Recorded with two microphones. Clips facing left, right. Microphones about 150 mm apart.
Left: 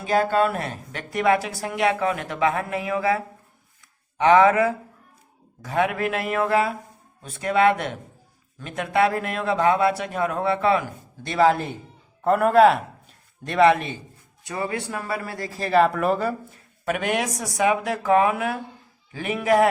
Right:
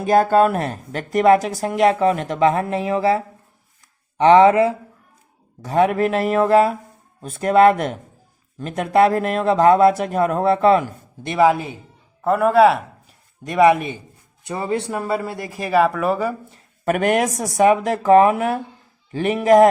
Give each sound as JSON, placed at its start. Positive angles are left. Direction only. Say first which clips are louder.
{"t": 0.0, "sound": "speech", "louder": "right 6 dB", "side_deg": -45}
{"t": 11.2, "sound": "speech", "louder": "right 3 dB", "side_deg": -15}
{"t": 16.8, "sound": "speech", "louder": "right 6 dB", "side_deg": -50}